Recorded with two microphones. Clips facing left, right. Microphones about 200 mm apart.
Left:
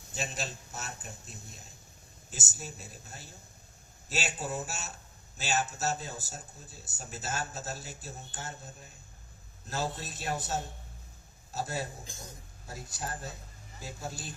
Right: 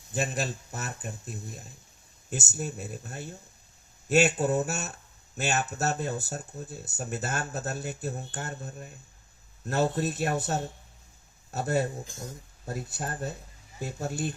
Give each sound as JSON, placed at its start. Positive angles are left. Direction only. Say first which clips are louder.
{"t": 0.1, "sound": "speech", "louder": "right 7 dB", "side_deg": -60}